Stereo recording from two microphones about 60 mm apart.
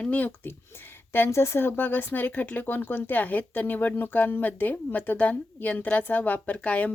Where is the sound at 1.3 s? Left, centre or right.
Left.